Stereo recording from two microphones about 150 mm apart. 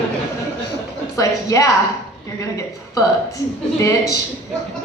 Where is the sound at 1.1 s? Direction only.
20° left (ahead or behind).